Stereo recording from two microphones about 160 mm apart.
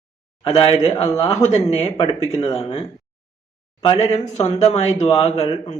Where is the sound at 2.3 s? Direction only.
40° left (ahead or behind).